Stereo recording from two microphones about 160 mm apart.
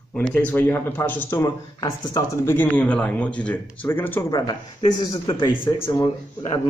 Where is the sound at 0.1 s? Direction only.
5° left (ahead or behind); by 2.5 s 25° left (ahead or behind).